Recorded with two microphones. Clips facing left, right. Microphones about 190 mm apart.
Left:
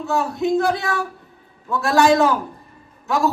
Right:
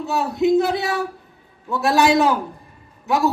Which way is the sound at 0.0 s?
20° right (ahead or behind).